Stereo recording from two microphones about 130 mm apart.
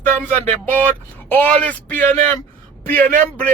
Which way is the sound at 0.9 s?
15° left (ahead or behind).